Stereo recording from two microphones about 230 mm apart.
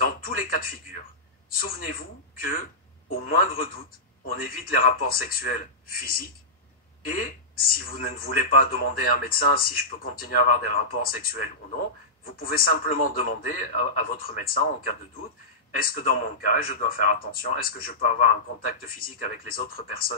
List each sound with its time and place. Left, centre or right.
0.0 s speech: left